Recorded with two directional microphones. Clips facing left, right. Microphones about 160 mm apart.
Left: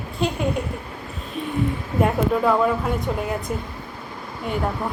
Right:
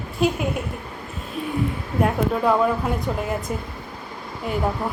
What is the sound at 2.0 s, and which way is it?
Speech, centre (ahead or behind).